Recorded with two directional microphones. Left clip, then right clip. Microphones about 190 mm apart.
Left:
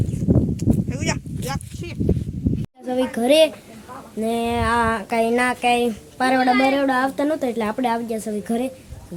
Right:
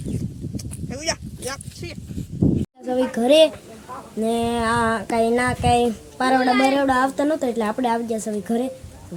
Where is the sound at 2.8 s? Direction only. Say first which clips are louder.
Even; 5° right (ahead or behind).